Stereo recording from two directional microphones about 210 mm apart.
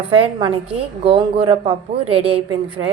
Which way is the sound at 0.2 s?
25° right (ahead or behind).